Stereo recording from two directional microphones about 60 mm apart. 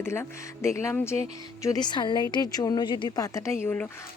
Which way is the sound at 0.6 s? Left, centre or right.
Left.